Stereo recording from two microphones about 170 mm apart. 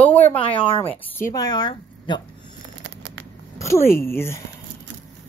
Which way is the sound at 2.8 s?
90° right.